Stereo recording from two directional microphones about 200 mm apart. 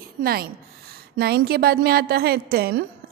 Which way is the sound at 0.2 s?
50° right (ahead or behind).